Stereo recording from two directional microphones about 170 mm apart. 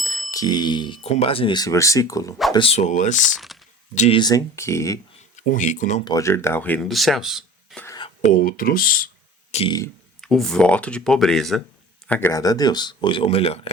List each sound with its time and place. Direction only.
0.0 s bicycle bell: 20° left (ahead or behind)
1.1 s speech: 35° left (ahead or behind)
2.5 s speech: 30° left (ahead or behind)
3.2 s speech: centre (ahead or behind)
3.9 s speech: 40° left (ahead or behind)
4.2 s speech: 20° left (ahead or behind)
5.4 s speech: 45° left (ahead or behind)
6.1 s speech: 20° left (ahead or behind); by 7.9 s centre (ahead or behind)
7.9 s whispering: 25° left (ahead or behind)
8.3 s speech: 55° left (ahead or behind)
9.5 s speech: 35° left (ahead or behind)
10.2 s speech: centre (ahead or behind); by 13.6 s 35° left (ahead or behind)